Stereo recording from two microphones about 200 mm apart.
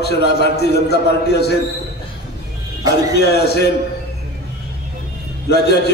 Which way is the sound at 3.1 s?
55° left (ahead or behind).